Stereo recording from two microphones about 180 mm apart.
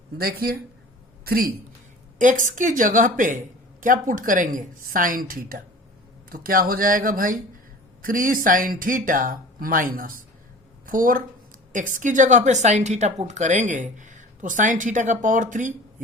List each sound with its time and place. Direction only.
0.2 s a woman's voice: 55° right (ahead or behind)
2.1 s a woman's voice: 45° right (ahead or behind)